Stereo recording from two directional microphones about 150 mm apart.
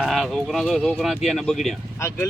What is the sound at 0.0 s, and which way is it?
Speech, centre (ahead or behind).